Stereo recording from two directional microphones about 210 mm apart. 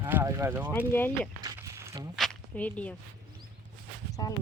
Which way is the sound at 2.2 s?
5° left (ahead or behind).